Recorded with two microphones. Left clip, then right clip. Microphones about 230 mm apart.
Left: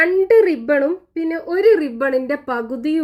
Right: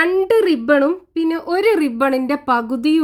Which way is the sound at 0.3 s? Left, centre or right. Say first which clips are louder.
Right 1 dB; right.